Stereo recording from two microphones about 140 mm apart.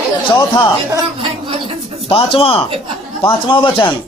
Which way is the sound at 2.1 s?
40° left (ahead or behind).